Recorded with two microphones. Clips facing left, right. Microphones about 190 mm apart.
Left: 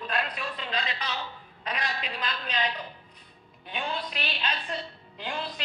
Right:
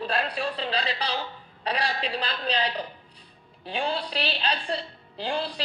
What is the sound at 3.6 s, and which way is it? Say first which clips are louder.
A woman's voice: right 5 dB; 35° right (ahead or behind).